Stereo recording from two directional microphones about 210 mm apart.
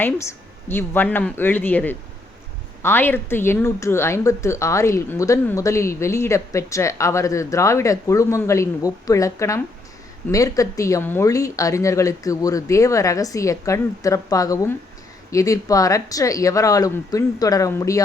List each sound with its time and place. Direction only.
0.0 s a woman's voice: 10° left (ahead or behind)